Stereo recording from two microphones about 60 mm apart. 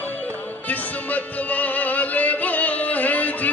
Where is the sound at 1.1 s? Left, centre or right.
Left.